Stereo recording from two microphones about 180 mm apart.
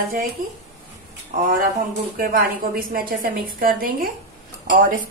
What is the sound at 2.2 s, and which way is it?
A woman's voice, 55° right (ahead or behind).